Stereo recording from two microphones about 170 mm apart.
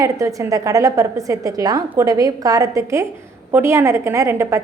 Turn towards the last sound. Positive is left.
turn(degrees=-15)  # may be behind; listen again after turning